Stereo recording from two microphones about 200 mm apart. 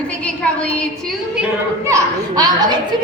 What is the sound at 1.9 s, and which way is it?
Speech, 15° right (ahead or behind).